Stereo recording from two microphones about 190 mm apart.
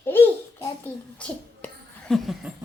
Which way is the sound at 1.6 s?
Centre (ahead or behind).